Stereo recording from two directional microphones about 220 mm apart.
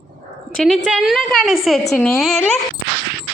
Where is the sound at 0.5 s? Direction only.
Centre (ahead or behind).